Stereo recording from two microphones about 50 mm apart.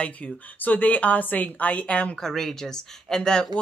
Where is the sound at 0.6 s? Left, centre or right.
Left.